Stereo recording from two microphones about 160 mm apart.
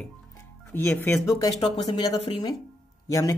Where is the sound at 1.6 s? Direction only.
35° left (ahead or behind).